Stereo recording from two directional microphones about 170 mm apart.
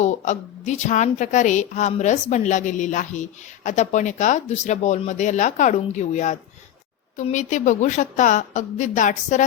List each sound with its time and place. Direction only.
0.0 s a woman's voice: 45° left (ahead or behind)